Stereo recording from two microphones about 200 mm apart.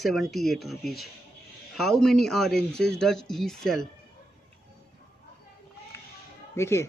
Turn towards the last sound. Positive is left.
turn(degrees=15)  # may be behind; listen again after turning